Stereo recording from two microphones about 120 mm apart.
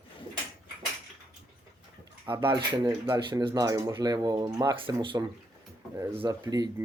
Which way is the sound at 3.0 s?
20° right (ahead or behind).